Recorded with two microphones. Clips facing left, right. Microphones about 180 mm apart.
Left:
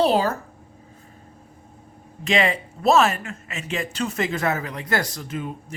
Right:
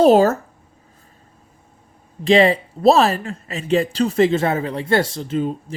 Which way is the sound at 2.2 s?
35° right (ahead or behind).